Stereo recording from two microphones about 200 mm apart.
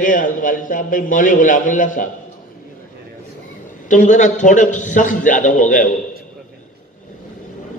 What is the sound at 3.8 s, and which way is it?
A man's voice, 40° left (ahead or behind).